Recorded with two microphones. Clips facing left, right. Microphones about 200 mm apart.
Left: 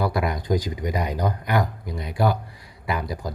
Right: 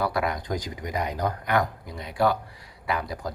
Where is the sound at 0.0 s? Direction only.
10° left (ahead or behind).